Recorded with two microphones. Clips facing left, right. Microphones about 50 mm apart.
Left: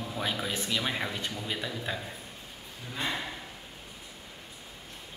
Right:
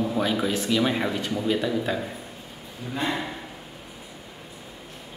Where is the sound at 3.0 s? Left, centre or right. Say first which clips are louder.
Right 5 dB; centre.